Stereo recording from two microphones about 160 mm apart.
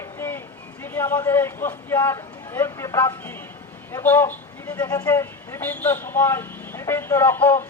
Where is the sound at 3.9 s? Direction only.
15° left (ahead or behind).